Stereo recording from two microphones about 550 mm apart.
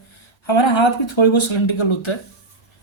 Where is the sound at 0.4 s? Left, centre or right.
Left.